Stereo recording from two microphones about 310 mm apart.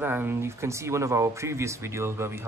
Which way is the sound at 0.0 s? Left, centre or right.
Centre.